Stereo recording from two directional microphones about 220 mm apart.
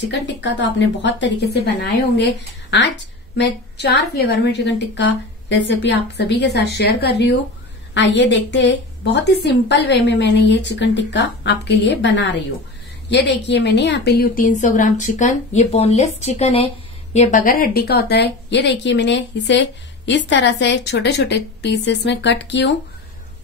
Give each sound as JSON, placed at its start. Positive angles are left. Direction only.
{"t": 0.0, "sound": "a woman's voice", "side_deg": 50}